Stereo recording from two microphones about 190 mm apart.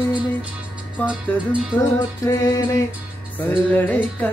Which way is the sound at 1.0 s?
5° right (ahead or behind).